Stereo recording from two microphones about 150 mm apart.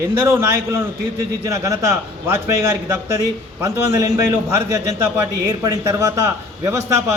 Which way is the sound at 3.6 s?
20° right (ahead or behind).